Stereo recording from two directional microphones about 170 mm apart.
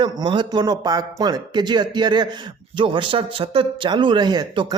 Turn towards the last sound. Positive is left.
turn(degrees=-25)  # may be behind; listen again after turning